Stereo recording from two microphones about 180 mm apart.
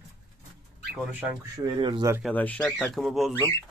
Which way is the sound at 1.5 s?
25° right (ahead or behind).